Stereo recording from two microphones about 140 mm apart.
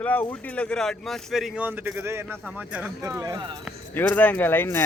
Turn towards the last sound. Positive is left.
turn(degrees=15)  # may be behind; listen again after turning